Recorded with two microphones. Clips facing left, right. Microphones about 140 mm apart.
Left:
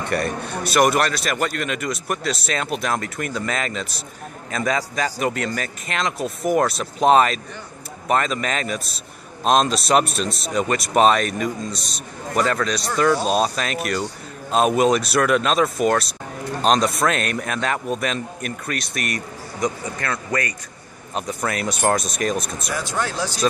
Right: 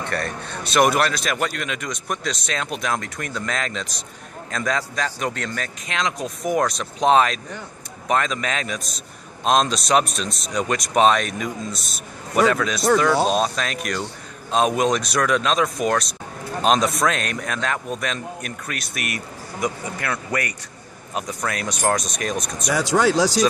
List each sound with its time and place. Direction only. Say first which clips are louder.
0.0 s a man's voice: left 4 dB; 10° left (ahead or behind); by 20.5 s 10° right (ahead or behind)
21.1 s a man's voice: left 2 dB; centre (ahead or behind)
22.7 s speech: right 9 dB; 85° right